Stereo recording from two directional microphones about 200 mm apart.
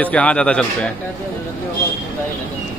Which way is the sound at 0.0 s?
5° left (ahead or behind).